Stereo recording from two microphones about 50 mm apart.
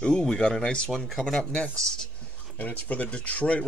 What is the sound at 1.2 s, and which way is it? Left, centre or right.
Speech, centre.